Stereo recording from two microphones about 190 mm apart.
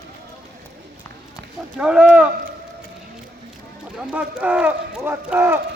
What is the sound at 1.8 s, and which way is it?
Speech, 5° right (ahead or behind).